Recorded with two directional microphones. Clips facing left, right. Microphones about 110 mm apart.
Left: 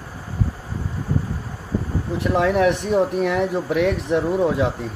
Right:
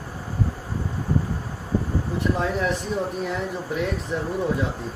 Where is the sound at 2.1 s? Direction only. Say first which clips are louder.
Left 7 dB; 70° left (ahead or behind).